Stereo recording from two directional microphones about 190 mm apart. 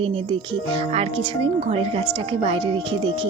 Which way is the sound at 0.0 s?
30° right (ahead or behind).